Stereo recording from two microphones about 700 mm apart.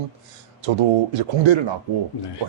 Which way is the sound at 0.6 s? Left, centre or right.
Right.